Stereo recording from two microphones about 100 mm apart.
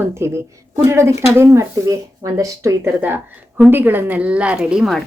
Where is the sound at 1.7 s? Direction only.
35° right (ahead or behind).